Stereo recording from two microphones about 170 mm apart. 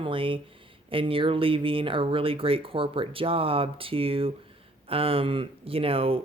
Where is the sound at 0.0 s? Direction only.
30° right (ahead or behind).